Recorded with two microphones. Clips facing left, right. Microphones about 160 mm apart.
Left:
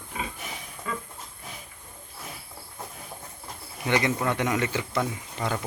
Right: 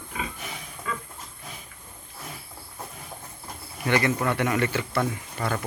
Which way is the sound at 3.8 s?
15° left (ahead or behind).